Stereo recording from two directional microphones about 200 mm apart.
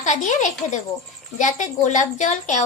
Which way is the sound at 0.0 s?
35° left (ahead or behind).